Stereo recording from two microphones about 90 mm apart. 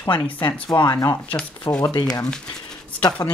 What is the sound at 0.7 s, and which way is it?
Speech, 50° left (ahead or behind).